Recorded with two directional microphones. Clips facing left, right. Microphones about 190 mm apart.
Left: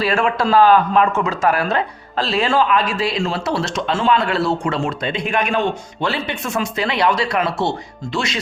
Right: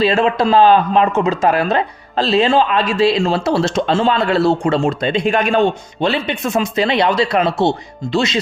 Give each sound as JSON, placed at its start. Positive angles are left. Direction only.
{"t": 0.0, "sound": "speech", "side_deg": -20}